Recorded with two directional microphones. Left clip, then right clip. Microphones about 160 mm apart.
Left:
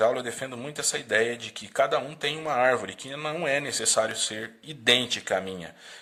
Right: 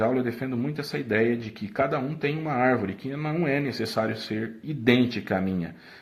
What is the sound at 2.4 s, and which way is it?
Speech, 40° left (ahead or behind).